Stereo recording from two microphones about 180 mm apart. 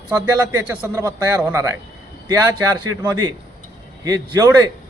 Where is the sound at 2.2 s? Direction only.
20° right (ahead or behind).